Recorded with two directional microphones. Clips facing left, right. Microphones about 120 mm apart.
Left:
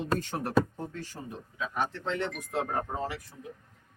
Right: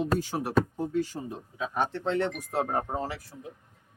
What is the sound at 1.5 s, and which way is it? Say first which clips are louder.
Speech: right 3 dB; 35° right (ahead or behind).